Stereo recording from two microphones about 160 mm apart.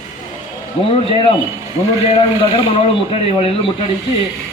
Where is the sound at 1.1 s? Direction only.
35° left (ahead or behind).